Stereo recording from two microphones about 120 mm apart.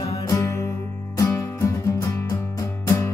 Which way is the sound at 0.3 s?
25° left (ahead or behind).